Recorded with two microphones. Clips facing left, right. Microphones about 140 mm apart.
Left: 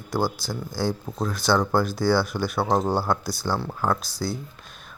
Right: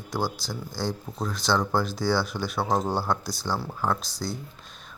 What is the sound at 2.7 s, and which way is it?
Speech, 25° left (ahead or behind).